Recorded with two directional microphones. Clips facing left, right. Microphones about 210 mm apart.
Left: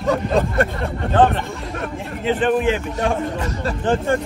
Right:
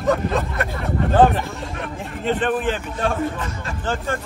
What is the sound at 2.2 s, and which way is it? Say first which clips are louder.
A man's voice: left 3 dB; 5° left (ahead or behind).